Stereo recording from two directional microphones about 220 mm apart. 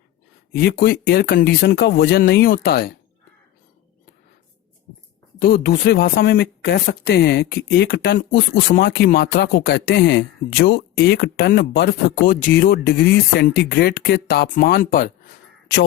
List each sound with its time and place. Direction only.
0.5 s speech: 45° left (ahead or behind)
5.4 s speech: 45° left (ahead or behind)